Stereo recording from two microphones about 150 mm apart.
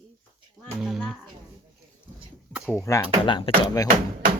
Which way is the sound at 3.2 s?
35° left (ahead or behind).